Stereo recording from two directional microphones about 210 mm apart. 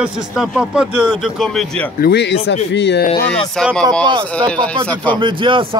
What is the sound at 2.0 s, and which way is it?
Speech, 50° left (ahead or behind).